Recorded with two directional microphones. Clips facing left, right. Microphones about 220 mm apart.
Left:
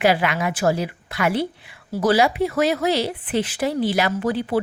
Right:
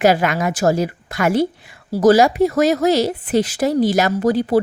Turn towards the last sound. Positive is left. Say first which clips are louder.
# right 5 dB
turn(degrees=-40)  # may be behind; listen again after turning